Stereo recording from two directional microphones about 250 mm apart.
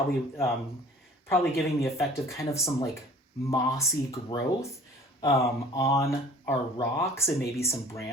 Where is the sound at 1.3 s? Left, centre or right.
Centre.